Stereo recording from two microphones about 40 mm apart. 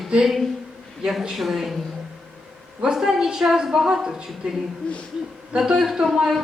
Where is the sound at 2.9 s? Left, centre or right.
Centre.